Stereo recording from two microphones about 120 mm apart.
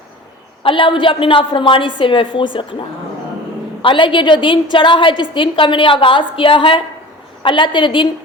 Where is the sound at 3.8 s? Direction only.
45° left (ahead or behind).